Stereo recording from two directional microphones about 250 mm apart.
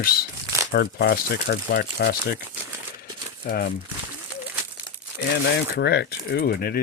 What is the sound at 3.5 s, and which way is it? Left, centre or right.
Speech, left.